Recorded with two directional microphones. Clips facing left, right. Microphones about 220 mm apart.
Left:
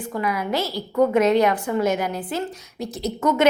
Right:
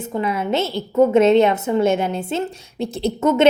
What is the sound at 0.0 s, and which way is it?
A woman's voice, 25° right (ahead or behind).